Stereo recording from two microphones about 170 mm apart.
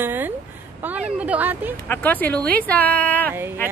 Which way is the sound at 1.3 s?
10° right (ahead or behind).